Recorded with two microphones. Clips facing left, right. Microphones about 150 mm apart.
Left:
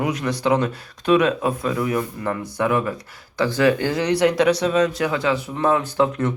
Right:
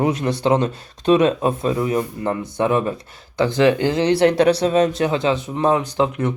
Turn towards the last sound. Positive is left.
turn(degrees=-15)  # may be behind; listen again after turning